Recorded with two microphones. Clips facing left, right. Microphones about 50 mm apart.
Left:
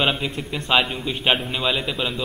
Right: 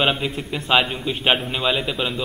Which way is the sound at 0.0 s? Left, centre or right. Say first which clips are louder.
Right 1 dB; centre.